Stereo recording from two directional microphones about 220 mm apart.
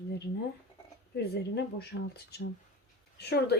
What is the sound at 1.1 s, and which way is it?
Speech, 50° left (ahead or behind).